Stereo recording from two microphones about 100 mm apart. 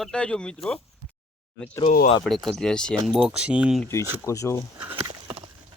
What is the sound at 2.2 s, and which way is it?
Speech, centre (ahead or behind).